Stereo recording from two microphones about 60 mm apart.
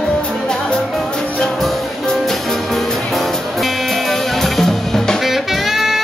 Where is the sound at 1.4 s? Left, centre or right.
Centre.